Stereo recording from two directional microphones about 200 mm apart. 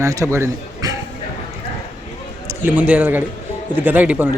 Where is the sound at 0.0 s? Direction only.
15° right (ahead or behind).